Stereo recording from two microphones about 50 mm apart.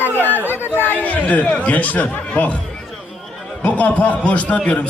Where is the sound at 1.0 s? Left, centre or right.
Left.